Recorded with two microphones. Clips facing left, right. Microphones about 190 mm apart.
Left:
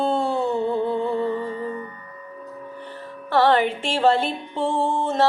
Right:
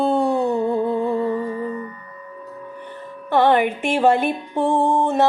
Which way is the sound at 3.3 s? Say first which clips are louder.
Right 2 dB; 15° right (ahead or behind).